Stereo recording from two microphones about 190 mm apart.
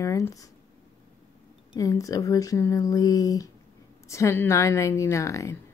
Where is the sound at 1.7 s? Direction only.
20° left (ahead or behind).